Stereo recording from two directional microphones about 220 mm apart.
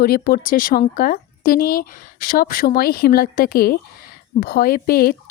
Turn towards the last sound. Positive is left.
turn(degrees=45)  # may be behind; listen again after turning